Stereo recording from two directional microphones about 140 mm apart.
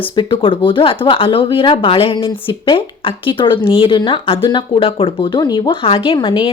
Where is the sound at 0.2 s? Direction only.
40° left (ahead or behind).